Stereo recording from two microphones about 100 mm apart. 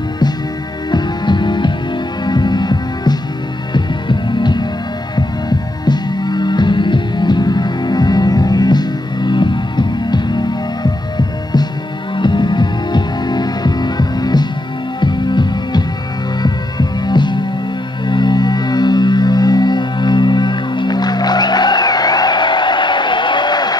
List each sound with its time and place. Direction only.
0.9 s music: 50° left (ahead or behind)
12.2 s heart sounds: 50° left (ahead or behind)
15.0 s music: 50° left (ahead or behind)